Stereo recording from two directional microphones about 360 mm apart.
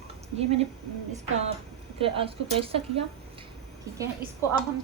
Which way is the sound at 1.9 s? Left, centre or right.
Centre.